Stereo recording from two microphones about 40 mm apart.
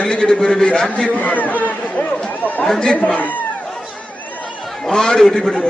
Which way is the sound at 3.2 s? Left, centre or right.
Left.